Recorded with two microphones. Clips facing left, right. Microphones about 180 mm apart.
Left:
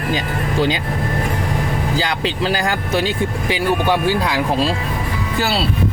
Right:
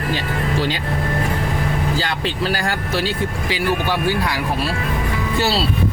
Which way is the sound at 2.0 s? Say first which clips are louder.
Left 2 dB; 15° left (ahead or behind).